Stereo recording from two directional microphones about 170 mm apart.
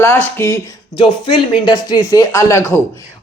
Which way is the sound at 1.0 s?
30° left (ahead or behind).